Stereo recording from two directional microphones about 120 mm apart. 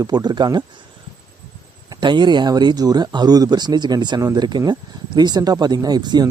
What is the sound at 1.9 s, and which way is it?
Speech, 40° right (ahead or behind).